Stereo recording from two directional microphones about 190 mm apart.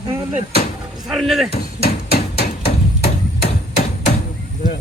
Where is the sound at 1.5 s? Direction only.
55° left (ahead or behind).